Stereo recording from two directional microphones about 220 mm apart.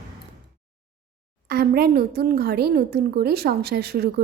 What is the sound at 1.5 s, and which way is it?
A woman's voice, 45° right (ahead or behind).